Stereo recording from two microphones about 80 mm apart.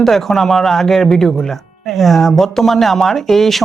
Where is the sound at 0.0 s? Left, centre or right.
Centre.